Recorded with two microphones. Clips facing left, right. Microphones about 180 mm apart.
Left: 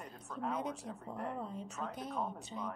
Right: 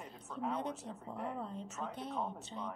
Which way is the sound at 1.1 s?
5° right (ahead or behind).